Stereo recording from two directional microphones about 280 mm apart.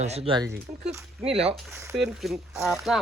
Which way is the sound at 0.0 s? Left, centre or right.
Right.